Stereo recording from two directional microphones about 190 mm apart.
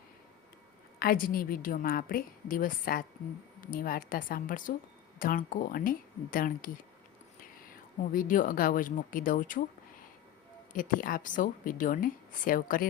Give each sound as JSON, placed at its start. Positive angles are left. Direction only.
{"t": 0.9, "sound": "a woman's voice", "side_deg": 50}
{"t": 7.7, "sound": "a woman's voice", "side_deg": 45}
{"t": 10.7, "sound": "a woman's voice", "side_deg": 45}